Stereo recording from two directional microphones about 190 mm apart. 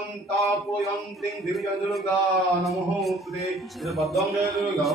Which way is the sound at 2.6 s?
Centre (ahead or behind).